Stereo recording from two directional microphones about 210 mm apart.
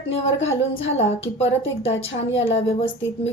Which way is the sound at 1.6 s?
65° left (ahead or behind).